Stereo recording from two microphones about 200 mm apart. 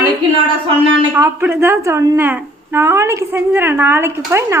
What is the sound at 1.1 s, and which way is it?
A woman's voice, 10° right (ahead or behind).